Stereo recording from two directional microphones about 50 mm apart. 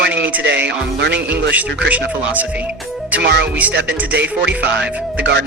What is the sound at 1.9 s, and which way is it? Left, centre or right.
Speech, right.